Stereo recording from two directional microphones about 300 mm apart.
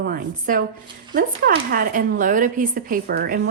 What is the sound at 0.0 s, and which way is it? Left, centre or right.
Speech, right.